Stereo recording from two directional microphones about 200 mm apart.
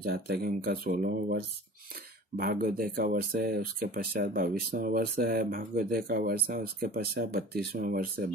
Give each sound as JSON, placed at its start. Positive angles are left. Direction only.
{"t": 0.0, "sound": "speech", "side_deg": -50}